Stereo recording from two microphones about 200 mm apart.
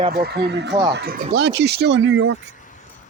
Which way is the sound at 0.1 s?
50° right (ahead or behind).